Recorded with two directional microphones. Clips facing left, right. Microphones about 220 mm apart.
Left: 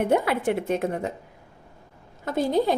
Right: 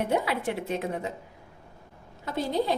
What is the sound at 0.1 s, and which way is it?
Speech, 50° left (ahead or behind).